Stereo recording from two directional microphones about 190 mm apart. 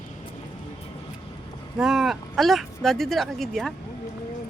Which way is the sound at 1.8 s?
Centre (ahead or behind).